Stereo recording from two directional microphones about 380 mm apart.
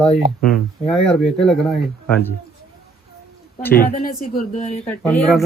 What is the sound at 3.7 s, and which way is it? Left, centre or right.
Speech, left.